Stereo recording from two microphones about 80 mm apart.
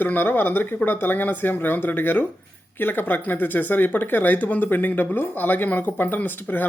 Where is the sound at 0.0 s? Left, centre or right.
Left.